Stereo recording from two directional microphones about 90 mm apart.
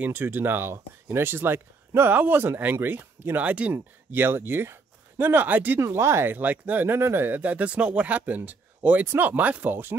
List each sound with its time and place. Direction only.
0.0 s speech: 25° right (ahead or behind)